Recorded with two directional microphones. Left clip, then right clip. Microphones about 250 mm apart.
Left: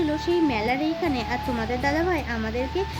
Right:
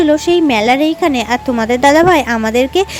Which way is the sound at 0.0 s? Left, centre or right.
Right.